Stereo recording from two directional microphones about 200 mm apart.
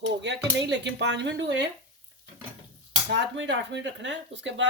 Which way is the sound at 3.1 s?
65° right (ahead or behind).